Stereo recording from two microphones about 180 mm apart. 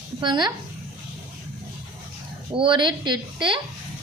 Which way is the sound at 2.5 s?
25° right (ahead or behind).